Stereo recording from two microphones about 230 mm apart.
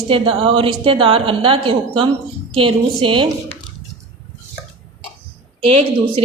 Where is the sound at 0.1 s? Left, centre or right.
Right.